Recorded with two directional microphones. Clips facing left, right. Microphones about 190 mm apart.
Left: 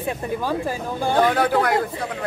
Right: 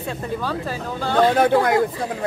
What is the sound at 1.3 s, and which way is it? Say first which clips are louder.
Speech: right 3 dB; 25° right (ahead or behind).